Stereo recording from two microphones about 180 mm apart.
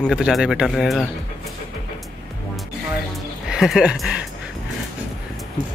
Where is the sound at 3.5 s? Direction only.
5° right (ahead or behind).